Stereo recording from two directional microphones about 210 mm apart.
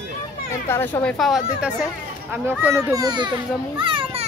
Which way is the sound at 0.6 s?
10° left (ahead or behind).